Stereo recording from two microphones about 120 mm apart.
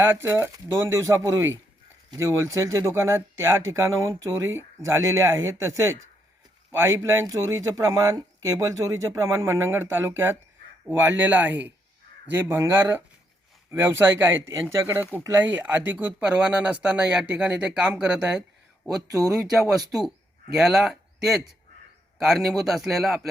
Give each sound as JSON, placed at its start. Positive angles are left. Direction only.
{"t": 0.0, "sound": "speech", "side_deg": -20}